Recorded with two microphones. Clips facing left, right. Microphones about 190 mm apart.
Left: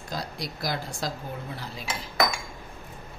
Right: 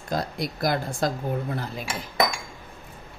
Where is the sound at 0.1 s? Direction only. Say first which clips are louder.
Right 7 dB; 55° right (ahead or behind).